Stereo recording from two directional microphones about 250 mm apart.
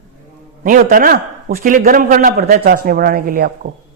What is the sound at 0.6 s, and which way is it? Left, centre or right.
A man's voice, right.